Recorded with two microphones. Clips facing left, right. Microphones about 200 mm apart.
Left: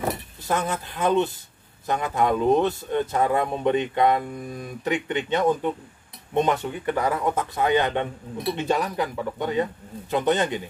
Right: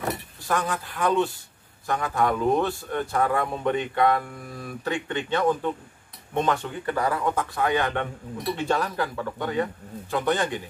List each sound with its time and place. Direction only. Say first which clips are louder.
0.5 s a man's voice: left 1 dB; 20° left (ahead or behind)